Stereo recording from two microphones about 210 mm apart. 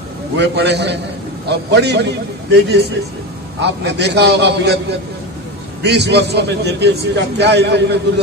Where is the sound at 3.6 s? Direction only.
55° right (ahead or behind).